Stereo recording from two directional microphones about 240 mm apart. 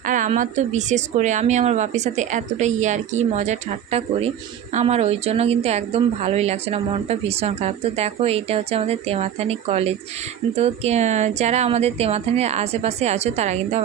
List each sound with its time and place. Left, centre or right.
0.0 s a woman's voice: right